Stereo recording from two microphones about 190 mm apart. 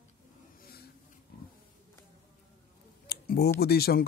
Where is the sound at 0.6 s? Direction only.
50° left (ahead or behind).